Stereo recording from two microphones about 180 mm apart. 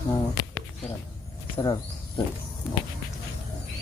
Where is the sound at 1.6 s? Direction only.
20° left (ahead or behind).